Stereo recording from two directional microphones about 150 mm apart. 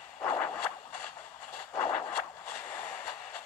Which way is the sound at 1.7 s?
10° left (ahead or behind).